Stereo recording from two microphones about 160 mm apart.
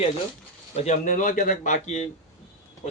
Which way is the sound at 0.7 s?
45° left (ahead or behind).